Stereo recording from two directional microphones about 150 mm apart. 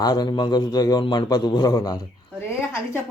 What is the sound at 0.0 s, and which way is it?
A man's voice, 25° left (ahead or behind).